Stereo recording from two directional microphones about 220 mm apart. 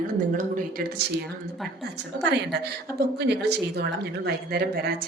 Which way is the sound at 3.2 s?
50° right (ahead or behind).